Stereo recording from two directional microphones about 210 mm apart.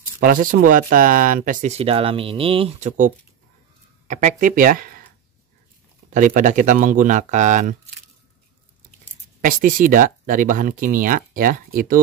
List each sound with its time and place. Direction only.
0.2 s speech: 40° right (ahead or behind)
4.1 s speech: 35° right (ahead or behind)
6.1 s speech: 40° right (ahead or behind)
9.4 s speech: 40° right (ahead or behind)